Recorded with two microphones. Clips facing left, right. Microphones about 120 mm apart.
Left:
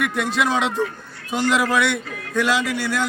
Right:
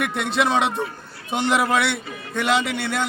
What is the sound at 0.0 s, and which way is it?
A man's voice, 25° right (ahead or behind).